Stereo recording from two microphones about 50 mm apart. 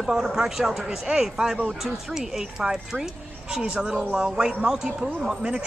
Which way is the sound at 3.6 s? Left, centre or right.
Right.